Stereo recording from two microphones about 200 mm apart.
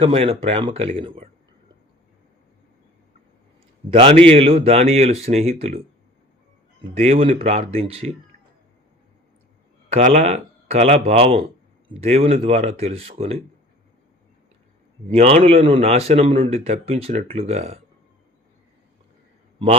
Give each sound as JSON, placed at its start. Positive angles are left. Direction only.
{"t": 0.0, "sound": "speech", "side_deg": -30}
{"t": 3.8, "sound": "a man's voice", "side_deg": -30}
{"t": 6.9, "sound": "speech", "side_deg": -30}
{"t": 9.9, "sound": "a man's voice", "side_deg": -35}
{"t": 15.1, "sound": "a man's voice", "side_deg": -30}